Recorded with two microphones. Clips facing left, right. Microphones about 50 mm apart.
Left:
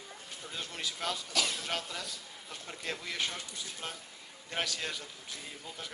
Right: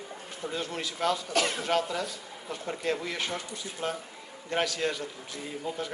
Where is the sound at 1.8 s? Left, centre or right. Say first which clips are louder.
Right 8 dB; centre.